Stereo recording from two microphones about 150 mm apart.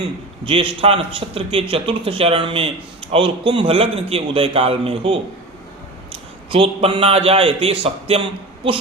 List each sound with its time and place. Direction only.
0.4 s a man's voice: 35° right (ahead or behind)